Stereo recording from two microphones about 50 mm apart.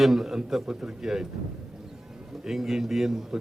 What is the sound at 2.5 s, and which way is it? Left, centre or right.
Speech, centre.